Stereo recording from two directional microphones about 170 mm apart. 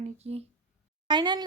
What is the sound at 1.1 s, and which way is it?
Speech, 25° right (ahead or behind).